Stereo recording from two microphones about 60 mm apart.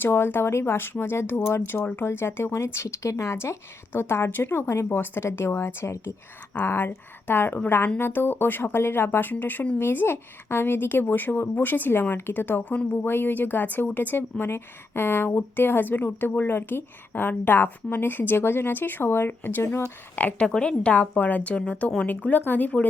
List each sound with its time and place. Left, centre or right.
0.0 s speech: left
6.5 s speech: left